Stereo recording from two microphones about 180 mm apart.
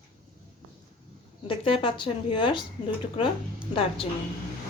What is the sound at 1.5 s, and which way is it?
A woman's voice, 30° left (ahead or behind).